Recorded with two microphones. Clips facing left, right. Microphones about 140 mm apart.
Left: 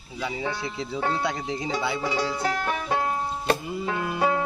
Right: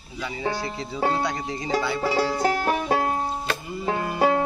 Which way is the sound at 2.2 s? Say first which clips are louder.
Right 4 dB; 55° right (ahead or behind).